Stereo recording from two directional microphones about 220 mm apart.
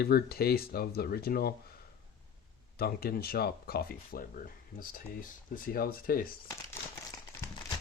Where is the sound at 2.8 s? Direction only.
45° left (ahead or behind).